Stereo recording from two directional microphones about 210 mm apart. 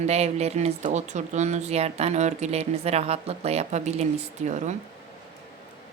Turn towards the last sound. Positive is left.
turn(degrees=-35)  # may be behind; listen again after turning